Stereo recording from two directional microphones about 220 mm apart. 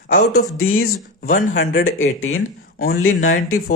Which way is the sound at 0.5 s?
70° left (ahead or behind).